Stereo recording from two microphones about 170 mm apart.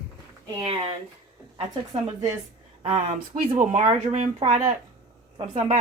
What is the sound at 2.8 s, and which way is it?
Speech, 40° right (ahead or behind).